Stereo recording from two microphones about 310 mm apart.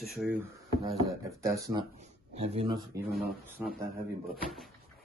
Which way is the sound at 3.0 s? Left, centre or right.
Right.